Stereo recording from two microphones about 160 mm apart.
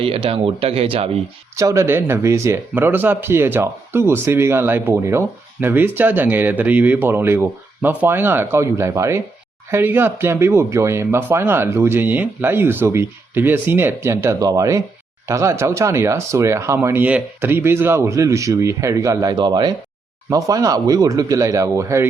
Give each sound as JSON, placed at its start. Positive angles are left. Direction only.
{"t": 0.0, "sound": "speech", "side_deg": -35}
{"t": 1.5, "sound": "speech", "side_deg": -20}